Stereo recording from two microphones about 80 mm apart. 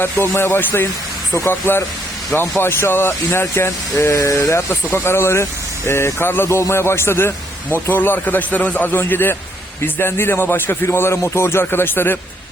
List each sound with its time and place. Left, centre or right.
0.0 s speech: left